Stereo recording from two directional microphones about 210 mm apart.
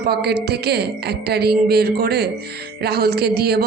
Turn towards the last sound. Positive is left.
turn(degrees=-50)  # may be behind; listen again after turning